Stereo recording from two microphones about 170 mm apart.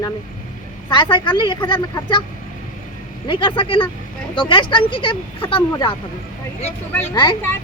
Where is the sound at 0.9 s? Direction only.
25° left (ahead or behind).